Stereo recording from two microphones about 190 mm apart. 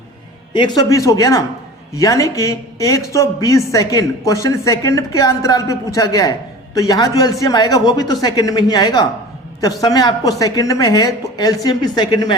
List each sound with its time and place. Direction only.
0.5 s a woman's voice: 25° left (ahead or behind)